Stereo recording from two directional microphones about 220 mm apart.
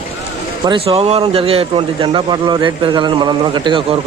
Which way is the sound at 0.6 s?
25° right (ahead or behind).